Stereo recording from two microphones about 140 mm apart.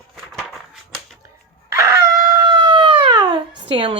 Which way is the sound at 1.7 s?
20° right (ahead or behind).